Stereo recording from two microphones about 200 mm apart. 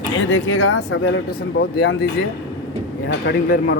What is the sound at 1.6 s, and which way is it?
Speech, 55° left (ahead or behind).